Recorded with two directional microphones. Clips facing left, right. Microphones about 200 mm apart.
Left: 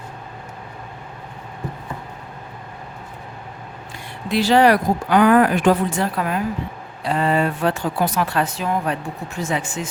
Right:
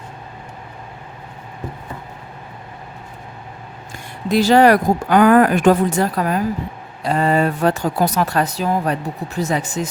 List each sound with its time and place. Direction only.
4.3 s speech: 45° right (ahead or behind)